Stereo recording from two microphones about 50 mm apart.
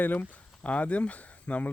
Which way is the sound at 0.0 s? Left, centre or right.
Left.